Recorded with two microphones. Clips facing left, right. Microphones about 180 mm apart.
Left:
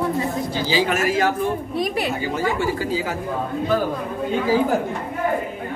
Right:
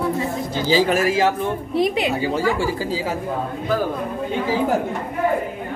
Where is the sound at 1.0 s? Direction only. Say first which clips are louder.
Right 1 dB; 25° right (ahead or behind).